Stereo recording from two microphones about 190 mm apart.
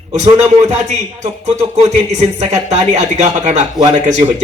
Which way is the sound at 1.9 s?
35° right (ahead or behind).